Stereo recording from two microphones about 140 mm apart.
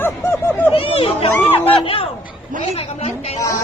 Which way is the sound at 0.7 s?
40° left (ahead or behind).